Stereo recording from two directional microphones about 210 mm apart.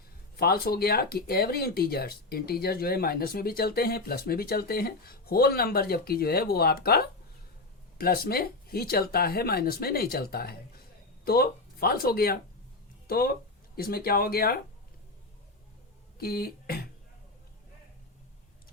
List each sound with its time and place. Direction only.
0.3 s speech: 50° left (ahead or behind)
16.1 s speech: 45° left (ahead or behind)